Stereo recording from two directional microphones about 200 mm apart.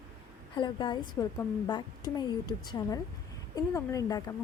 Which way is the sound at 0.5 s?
25° left (ahead or behind).